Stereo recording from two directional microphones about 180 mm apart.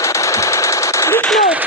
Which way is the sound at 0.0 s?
15° left (ahead or behind).